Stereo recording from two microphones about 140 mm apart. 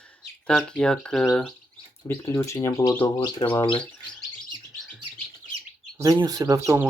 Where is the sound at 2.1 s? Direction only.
15° left (ahead or behind).